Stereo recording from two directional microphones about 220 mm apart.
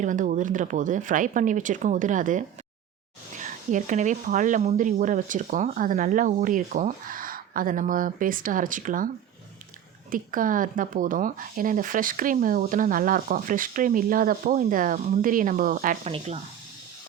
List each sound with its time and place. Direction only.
0.0 s speech: 35° right (ahead or behind)
10.1 s speech: 40° right (ahead or behind)